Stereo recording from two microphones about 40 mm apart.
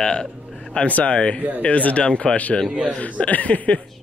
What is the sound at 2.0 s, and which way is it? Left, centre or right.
Gasp, left.